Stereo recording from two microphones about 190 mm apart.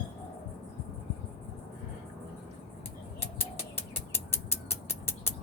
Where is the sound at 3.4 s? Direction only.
10° left (ahead or behind).